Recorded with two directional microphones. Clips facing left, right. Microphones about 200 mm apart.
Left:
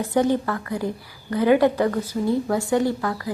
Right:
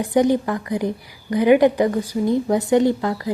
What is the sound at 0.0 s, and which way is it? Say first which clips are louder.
A woman's voice: right 3 dB; 15° right (ahead or behind).